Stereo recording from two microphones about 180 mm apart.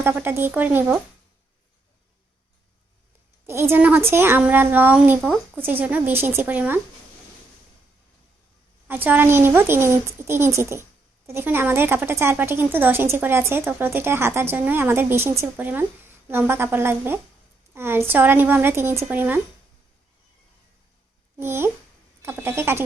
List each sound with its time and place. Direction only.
0.0 s a woman's voice: 10° right (ahead or behind)
3.4 s a woman's voice: 15° right (ahead or behind)
9.0 s a woman's voice: 10° right (ahead or behind)
21.3 s a woman's voice: 15° right (ahead or behind)